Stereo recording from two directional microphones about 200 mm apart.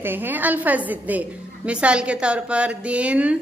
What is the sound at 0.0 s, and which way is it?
A woman's voice, 10° right (ahead or behind).